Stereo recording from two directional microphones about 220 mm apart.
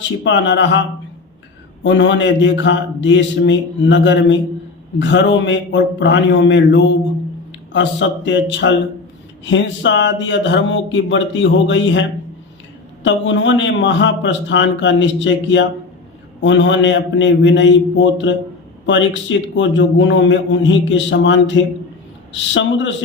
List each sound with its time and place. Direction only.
0.3 s a man's voice: 55° left (ahead or behind)
1.8 s a man's voice: 55° left (ahead or behind)